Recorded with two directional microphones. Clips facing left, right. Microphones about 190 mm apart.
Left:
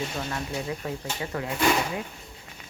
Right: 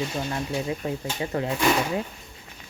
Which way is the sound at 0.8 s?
25° right (ahead or behind).